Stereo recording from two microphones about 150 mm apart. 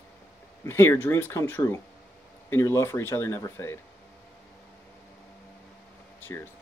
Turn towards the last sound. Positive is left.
turn(degrees=15)  # may be behind; listen again after turning